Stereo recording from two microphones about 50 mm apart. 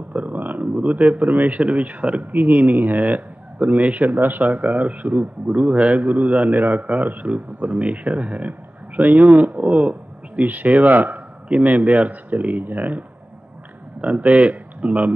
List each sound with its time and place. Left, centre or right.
0.1 s speech: right
14.0 s speech: right